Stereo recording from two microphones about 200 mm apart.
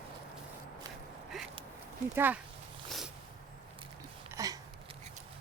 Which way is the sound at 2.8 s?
Centre (ahead or behind).